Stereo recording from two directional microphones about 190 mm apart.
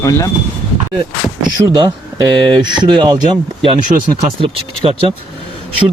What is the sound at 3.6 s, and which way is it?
Speech, 40° right (ahead or behind).